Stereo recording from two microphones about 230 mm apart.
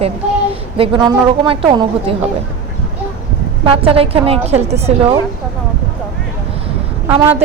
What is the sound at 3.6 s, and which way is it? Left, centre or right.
A woman's voice, right.